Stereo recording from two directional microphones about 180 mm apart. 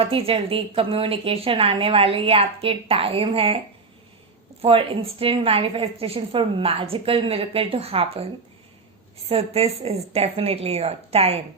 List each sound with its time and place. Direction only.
0.0 s a woman's voice: 30° right (ahead or behind)
4.6 s a woman's voice: 30° right (ahead or behind)
9.3 s a woman's voice: 35° right (ahead or behind)